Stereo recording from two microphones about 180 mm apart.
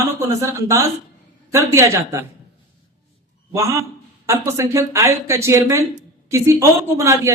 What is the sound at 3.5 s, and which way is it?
A man's voice, 15° right (ahead or behind).